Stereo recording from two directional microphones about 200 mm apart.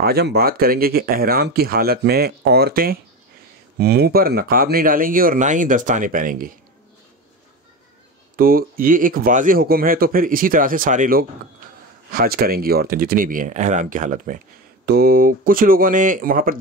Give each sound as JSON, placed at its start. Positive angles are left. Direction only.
{"t": 0.0, "sound": "speech", "side_deg": -55}
{"t": 8.4, "sound": "speech", "side_deg": -45}